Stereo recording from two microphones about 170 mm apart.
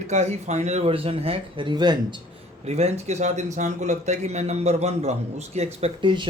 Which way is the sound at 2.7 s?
40° right (ahead or behind).